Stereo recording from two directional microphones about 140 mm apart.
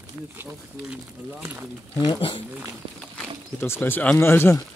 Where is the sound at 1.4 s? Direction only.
15° right (ahead or behind).